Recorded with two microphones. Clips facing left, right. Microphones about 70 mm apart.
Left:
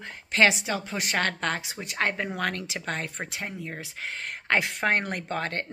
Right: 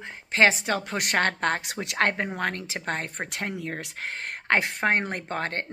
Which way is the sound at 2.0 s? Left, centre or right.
Right.